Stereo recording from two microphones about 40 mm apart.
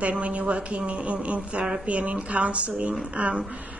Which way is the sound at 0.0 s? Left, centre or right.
Right.